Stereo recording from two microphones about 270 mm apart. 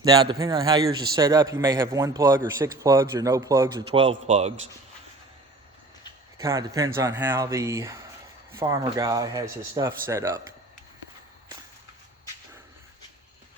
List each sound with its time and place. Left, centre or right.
0.0 s a man's voice: centre
6.4 s a man's voice: centre